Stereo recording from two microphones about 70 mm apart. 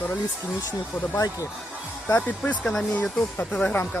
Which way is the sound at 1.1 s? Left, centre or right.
Left.